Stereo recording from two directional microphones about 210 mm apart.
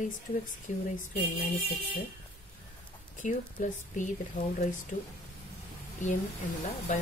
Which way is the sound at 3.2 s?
35° left (ahead or behind).